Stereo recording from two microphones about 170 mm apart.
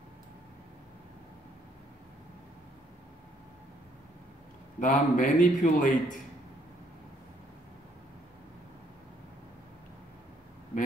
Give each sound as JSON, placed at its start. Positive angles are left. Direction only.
{"t": 4.7, "sound": "a man's voice", "side_deg": 50}